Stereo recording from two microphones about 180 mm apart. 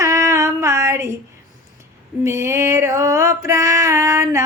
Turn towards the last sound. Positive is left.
turn(degrees=-15)  # may be behind; listen again after turning